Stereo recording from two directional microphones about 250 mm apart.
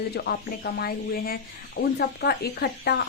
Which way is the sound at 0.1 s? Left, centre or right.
Left.